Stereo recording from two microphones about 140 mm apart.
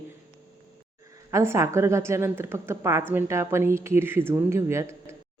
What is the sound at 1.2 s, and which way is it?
A woman's voice, 20° right (ahead or behind).